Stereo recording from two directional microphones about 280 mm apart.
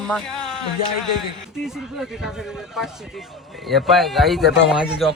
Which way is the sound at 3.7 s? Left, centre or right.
Centre.